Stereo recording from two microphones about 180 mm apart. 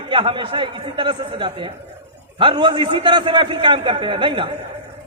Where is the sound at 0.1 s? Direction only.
30° right (ahead or behind).